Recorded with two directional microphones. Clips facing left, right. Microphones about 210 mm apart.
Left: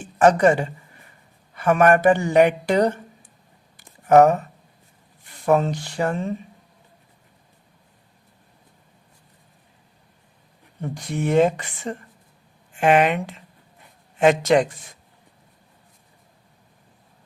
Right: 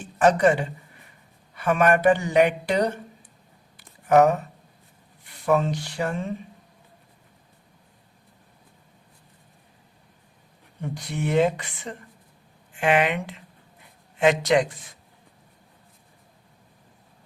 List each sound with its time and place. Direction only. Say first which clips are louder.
0.2 s speech: left 3 dB; 45° left (ahead or behind)
3.8 s a sound: left 4 dB; 45° left (ahead or behind)
5.5 s speech: left 3 dB; 50° left (ahead or behind)
10.9 s speech: left 4 dB; 45° left (ahead or behind)
14.2 s speech: left 3 dB; 45° left (ahead or behind)